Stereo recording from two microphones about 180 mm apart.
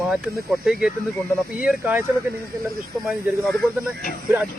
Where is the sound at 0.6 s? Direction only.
5° right (ahead or behind).